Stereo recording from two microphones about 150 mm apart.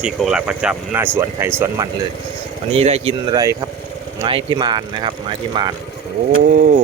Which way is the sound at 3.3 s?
25° right (ahead or behind).